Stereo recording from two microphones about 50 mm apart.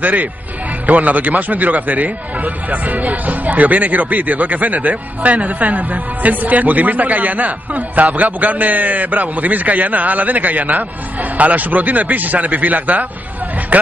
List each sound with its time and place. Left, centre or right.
0.0 s speech: right